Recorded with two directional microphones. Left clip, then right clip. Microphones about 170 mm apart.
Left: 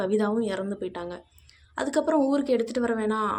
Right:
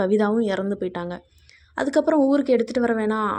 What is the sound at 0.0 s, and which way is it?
Speech, 35° right (ahead or behind).